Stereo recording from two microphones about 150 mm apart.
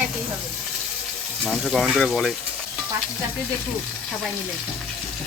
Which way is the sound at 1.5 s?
Centre (ahead or behind).